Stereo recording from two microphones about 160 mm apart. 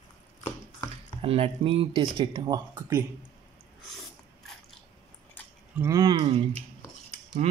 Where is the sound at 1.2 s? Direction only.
35° right (ahead or behind).